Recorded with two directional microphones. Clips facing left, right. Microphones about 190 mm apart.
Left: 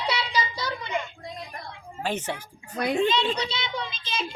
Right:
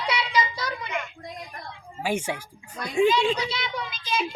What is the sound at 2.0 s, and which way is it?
Speech, 10° right (ahead or behind).